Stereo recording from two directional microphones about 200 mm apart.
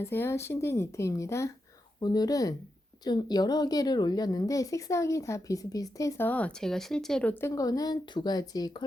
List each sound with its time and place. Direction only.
0.0 s a woman's voice: 10° left (ahead or behind)